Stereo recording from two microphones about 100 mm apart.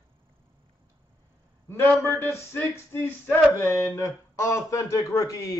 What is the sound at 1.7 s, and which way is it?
Speech, 25° left (ahead or behind).